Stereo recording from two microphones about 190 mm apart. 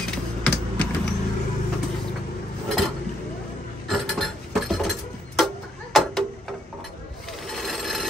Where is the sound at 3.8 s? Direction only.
Centre (ahead or behind).